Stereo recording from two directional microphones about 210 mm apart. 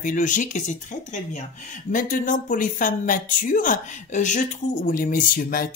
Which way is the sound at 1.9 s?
40° left (ahead or behind).